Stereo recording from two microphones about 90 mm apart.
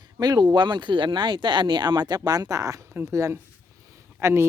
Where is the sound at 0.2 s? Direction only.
50° right (ahead or behind).